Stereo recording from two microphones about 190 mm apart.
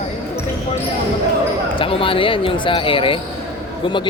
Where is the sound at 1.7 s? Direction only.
30° left (ahead or behind).